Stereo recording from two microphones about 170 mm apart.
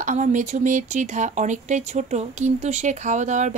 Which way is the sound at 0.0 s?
45° right (ahead or behind).